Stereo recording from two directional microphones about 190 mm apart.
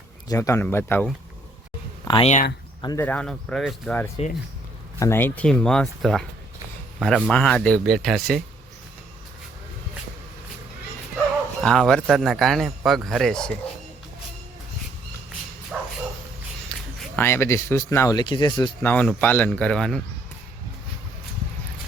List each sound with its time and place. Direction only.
0.3 s speech: 15° left (ahead or behind)
2.0 s speech: 25° left (ahead or behind)
2.8 s a man's voice: 15° left (ahead or behind)
11.6 s a man's voice: 5° left (ahead or behind)
15.7 s bow-wow: centre (ahead or behind)
16.6 s speech: 10° left (ahead or behind); by 18.7 s 25° left (ahead or behind)
18.8 s a man's voice: 10° left (ahead or behind)